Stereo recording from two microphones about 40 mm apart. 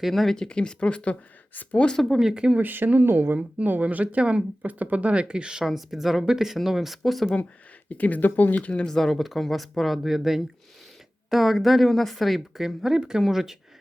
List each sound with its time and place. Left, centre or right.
0.1 s speech: centre
0.3 s speech: left
2.1 s speech: centre
2.6 s speech: right
3.3 s speech: right
4.6 s speech: right
5.6 s speech: centre
7.9 s speech: left
8.5 s speech: left
8.8 s speech: centre